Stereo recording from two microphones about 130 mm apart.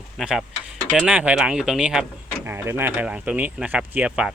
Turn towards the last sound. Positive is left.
turn(degrees=-5)  # may be behind; listen again after turning